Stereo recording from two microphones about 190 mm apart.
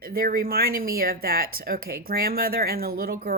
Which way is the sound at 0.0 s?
50° right (ahead or behind).